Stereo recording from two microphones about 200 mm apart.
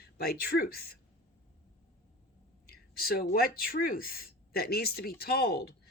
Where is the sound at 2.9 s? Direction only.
50° left (ahead or behind).